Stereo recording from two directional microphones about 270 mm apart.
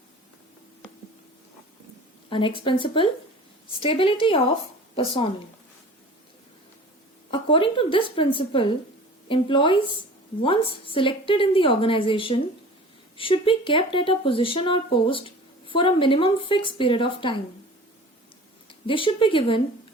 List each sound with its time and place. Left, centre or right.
2.3 s speech: centre
7.3 s speech: centre
18.9 s speech: centre